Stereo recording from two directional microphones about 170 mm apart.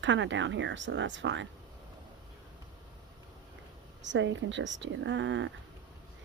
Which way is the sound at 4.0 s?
90° right.